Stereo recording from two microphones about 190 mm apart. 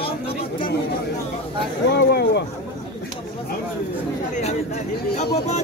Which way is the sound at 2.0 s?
55° left (ahead or behind).